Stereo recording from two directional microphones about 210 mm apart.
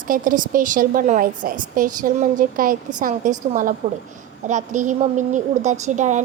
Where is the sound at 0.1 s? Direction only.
40° right (ahead or behind).